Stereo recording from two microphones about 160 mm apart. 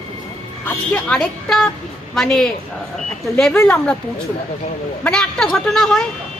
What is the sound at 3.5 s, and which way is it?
Speech, 15° left (ahead or behind).